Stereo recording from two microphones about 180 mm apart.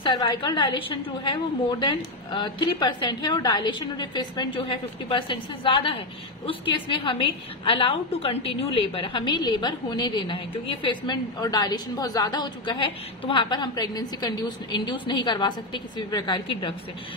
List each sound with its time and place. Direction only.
0.0 s a woman's voice: 25° left (ahead or behind)